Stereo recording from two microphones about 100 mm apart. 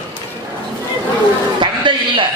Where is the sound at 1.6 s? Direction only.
55° right (ahead or behind).